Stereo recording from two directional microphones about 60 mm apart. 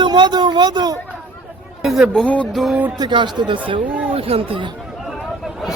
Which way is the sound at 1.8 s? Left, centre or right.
Centre.